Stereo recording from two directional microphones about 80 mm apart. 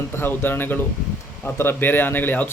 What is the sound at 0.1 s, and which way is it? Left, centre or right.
Speech, left.